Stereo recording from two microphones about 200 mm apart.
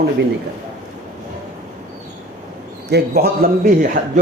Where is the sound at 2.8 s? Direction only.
55° right (ahead or behind).